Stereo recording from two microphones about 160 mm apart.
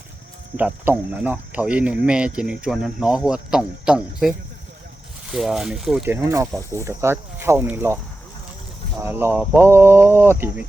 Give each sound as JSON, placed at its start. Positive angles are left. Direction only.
{"t": 0.5, "sound": "speech", "side_deg": -10}
{"t": 6.1, "sound": "speech", "side_deg": -15}
{"t": 9.0, "sound": "speech", "side_deg": -15}